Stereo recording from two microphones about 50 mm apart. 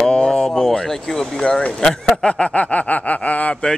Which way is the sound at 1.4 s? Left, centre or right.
Left.